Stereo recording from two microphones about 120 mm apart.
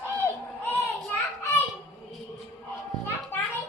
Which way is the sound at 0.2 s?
15° left (ahead or behind).